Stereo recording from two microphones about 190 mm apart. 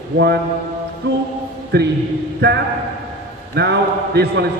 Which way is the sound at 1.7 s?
60° right (ahead or behind).